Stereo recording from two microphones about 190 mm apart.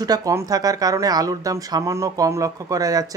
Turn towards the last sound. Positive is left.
turn(degrees=-20)  # may be behind; listen again after turning